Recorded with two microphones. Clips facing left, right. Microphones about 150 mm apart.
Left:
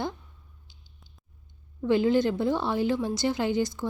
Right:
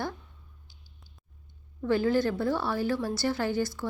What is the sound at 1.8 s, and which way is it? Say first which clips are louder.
A woman's voice: left 3 dB; 20° left (ahead or behind).